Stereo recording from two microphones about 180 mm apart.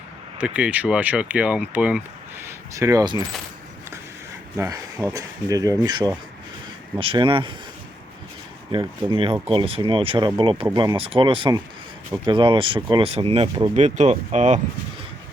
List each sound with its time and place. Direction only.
0.3 s speech: 5° right (ahead or behind); by 3.2 s 20° right (ahead or behind)
4.5 s speech: 15° right (ahead or behind)
8.7 s speech: 30° right (ahead or behind)